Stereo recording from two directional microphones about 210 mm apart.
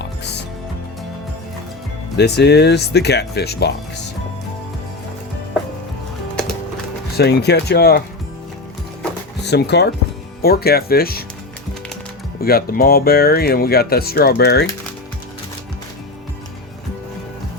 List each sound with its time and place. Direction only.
0.0 s music: 55° left (ahead or behind)
2.1 s speech: 50° left (ahead or behind)
7.2 s speech: 50° left (ahead or behind)
9.4 s speech: 50° left (ahead or behind)
12.4 s speech: 45° left (ahead or behind)